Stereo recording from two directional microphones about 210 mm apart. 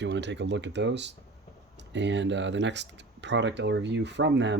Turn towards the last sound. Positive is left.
turn(degrees=-55)  # may be behind; listen again after turning